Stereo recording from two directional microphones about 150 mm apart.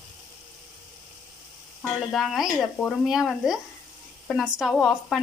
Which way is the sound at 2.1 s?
Centre (ahead or behind).